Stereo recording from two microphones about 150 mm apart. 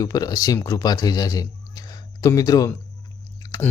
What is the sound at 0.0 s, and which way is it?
Speech, 25° left (ahead or behind).